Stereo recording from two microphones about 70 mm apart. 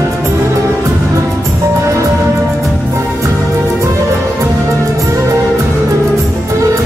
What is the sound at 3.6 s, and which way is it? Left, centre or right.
Music, right.